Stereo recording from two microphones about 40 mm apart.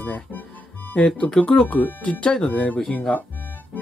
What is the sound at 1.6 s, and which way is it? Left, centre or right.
Speech, left.